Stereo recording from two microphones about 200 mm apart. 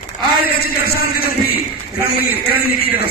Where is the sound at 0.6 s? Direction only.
50° left (ahead or behind).